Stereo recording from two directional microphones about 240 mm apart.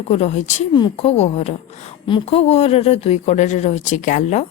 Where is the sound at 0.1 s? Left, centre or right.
Left.